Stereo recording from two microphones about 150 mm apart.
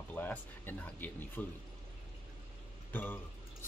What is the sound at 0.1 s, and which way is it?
Speech, 10° left (ahead or behind).